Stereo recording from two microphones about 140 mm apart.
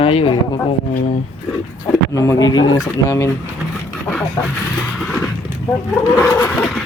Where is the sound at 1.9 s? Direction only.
20° left (ahead or behind).